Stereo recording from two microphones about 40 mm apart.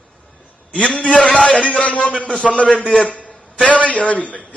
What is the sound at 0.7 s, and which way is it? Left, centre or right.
A man's voice, left.